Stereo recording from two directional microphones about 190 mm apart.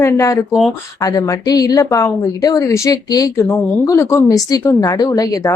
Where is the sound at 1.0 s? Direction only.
20° left (ahead or behind).